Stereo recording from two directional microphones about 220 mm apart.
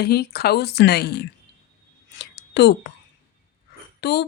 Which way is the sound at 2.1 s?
50° left (ahead or behind).